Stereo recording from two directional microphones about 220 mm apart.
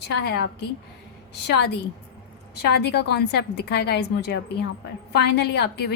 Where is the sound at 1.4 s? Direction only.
50° left (ahead or behind).